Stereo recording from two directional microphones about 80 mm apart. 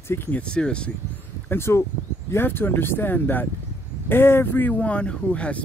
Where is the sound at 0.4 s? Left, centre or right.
Centre.